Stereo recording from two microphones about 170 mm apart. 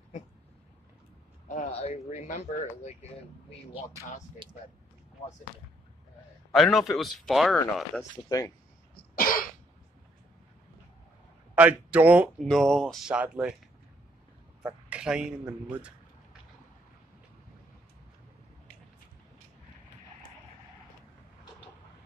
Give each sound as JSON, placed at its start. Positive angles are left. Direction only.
{"t": 1.5, "sound": "speech", "side_deg": 45}
{"t": 4.4, "sound": "speech", "side_deg": -30}
{"t": 6.5, "sound": "speech", "side_deg": 0}
{"t": 8.3, "sound": "speech", "side_deg": 20}
{"t": 8.9, "sound": "cough", "side_deg": 60}
{"t": 11.5, "sound": "speech", "side_deg": -10}
{"t": 12.4, "sound": "speech", "side_deg": 5}
{"t": 14.6, "sound": "speech", "side_deg": -5}